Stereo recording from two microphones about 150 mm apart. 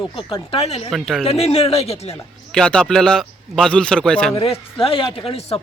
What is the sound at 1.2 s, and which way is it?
Speech, 40° left (ahead or behind).